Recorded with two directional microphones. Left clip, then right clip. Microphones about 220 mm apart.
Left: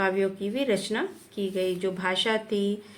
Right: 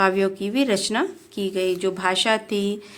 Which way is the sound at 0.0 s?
50° right (ahead or behind).